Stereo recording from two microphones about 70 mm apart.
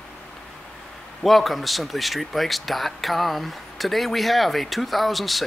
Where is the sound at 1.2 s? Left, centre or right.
Centre.